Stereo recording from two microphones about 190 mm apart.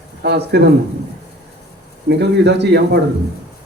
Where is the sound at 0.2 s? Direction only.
60° right (ahead or behind).